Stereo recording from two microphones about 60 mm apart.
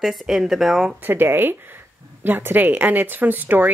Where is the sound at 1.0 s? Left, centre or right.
Right.